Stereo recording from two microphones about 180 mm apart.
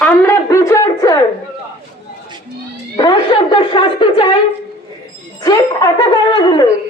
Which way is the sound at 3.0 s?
25° left (ahead or behind).